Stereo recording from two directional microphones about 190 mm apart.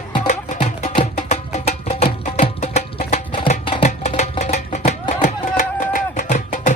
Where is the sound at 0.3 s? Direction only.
40° left (ahead or behind).